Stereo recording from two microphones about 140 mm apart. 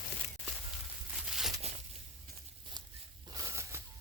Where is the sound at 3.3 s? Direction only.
20° right (ahead or behind).